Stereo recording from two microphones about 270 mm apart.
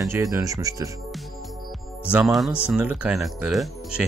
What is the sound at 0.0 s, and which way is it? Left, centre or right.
Speech, centre.